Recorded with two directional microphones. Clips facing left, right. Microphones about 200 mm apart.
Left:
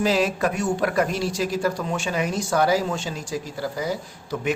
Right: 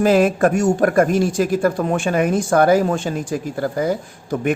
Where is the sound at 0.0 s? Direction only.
50° right (ahead or behind).